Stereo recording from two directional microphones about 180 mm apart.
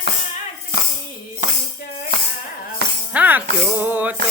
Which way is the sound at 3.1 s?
10° right (ahead or behind).